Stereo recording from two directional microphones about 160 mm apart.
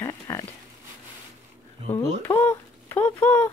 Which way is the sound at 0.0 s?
20° left (ahead or behind).